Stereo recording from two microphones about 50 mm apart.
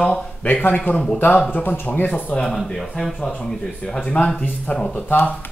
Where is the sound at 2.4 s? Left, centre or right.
Centre.